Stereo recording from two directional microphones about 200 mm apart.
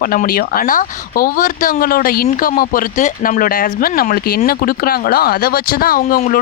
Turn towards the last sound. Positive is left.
turn(degrees=45)  # may be behind; listen again after turning